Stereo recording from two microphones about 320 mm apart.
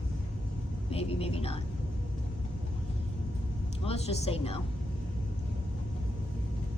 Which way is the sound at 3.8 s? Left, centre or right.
Centre.